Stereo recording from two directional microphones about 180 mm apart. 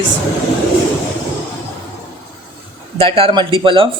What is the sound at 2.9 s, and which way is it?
Speech, 30° right (ahead or behind).